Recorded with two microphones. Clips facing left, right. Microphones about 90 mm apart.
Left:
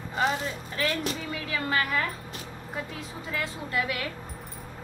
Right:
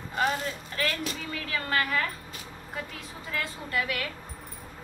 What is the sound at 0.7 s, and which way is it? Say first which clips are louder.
Speech: left 3 dB; 10° left (ahead or behind).